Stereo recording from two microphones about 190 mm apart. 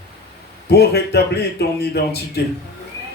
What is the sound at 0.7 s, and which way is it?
Speech, 60° left (ahead or behind).